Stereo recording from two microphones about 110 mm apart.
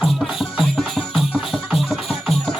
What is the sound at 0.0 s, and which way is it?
Music, centre (ahead or behind).